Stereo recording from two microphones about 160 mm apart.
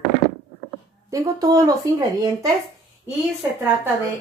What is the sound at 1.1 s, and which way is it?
Speech, 20° right (ahead or behind).